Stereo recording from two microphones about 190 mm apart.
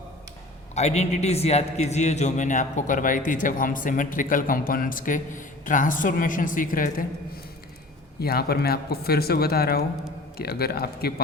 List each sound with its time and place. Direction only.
0.8 s a man's voice: 35° left (ahead or behind)
8.2 s speech: 55° left (ahead or behind)